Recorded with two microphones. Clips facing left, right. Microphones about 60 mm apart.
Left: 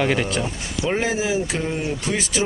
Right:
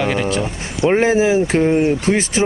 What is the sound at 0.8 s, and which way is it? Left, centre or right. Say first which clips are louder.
Speech: right 9 dB; right.